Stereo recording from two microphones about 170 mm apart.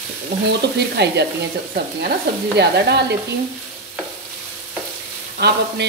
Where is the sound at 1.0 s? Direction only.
80° right.